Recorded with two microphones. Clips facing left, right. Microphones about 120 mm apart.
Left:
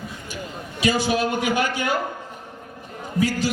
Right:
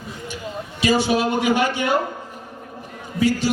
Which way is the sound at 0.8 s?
30° right (ahead or behind).